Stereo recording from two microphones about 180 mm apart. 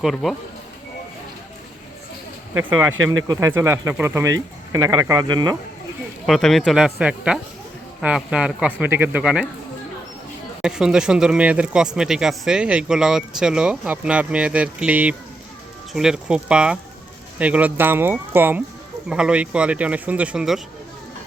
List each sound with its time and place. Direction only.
0.0 s speech: centre (ahead or behind)
2.6 s speech: 10° right (ahead or behind)
6.2 s speech: centre (ahead or behind)
10.6 s speech: 5° right (ahead or behind)